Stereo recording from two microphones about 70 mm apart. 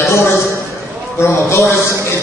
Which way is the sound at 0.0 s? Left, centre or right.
Left.